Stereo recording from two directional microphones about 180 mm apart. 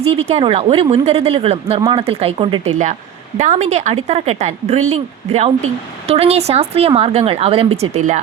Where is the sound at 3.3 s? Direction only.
40° right (ahead or behind).